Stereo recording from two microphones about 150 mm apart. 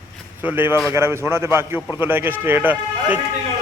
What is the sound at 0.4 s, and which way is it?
A man's voice, 15° right (ahead or behind).